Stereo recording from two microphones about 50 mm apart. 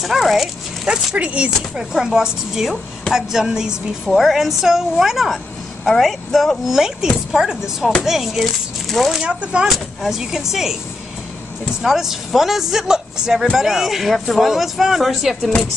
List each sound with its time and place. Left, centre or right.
0.0 s speech: centre
0.8 s speech: right
1.8 s a woman's voice: centre
7.3 s a woman's voice: centre
9.4 s speech: right
9.7 s a woman's voice: centre
11.8 s a woman's voice: centre